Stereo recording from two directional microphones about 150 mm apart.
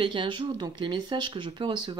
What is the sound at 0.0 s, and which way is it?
Speech, 35° right (ahead or behind).